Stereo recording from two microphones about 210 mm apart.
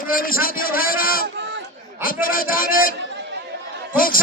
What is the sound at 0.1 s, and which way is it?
A man's voice, 45° left (ahead or behind).